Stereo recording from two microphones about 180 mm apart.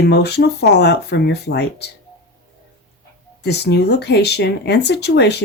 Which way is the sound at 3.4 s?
70° left (ahead or behind).